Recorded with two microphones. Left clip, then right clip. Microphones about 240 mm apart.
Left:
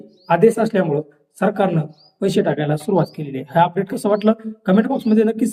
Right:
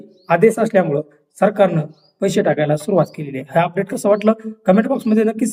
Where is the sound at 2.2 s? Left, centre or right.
Centre.